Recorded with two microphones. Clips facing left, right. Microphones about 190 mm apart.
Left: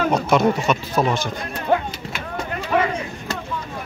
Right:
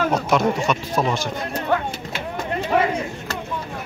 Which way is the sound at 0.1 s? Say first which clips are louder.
Left 2 dB; centre (ahead or behind).